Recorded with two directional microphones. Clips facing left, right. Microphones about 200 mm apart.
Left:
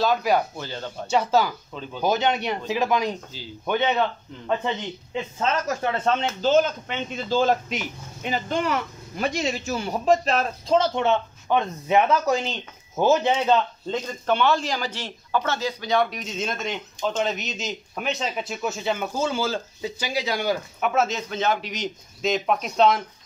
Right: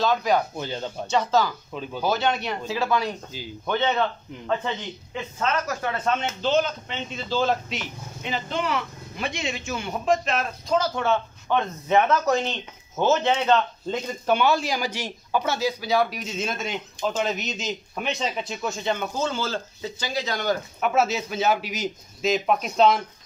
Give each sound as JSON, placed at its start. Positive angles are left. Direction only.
{"t": 0.0, "sound": "speech", "side_deg": 10}
{"t": 0.6, "sound": "speech", "side_deg": -20}
{"t": 1.0, "sound": "speech", "side_deg": 10}
{"t": 1.7, "sound": "speech", "side_deg": -10}
{"t": 2.0, "sound": "speech", "side_deg": 15}
{"t": 5.4, "sound": "speech", "side_deg": 25}
{"t": 6.4, "sound": "speech", "side_deg": 45}
{"t": 13.8, "sound": "a man's voice", "side_deg": -10}
{"t": 20.8, "sound": "a man's voice", "side_deg": -5}